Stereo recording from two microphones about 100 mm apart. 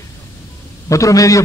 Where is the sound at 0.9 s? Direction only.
35° left (ahead or behind).